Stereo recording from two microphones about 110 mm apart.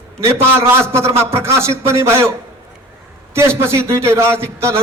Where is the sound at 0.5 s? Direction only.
25° right (ahead or behind).